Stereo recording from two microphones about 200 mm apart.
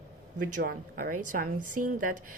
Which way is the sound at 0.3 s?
45° right (ahead or behind).